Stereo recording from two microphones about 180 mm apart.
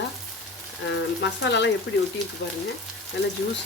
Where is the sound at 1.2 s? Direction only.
75° left (ahead or behind).